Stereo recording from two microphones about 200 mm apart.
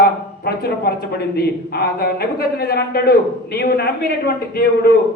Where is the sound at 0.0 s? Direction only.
50° left (ahead or behind).